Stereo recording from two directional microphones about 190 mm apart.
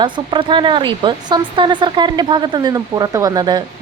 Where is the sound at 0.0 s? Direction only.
25° right (ahead or behind).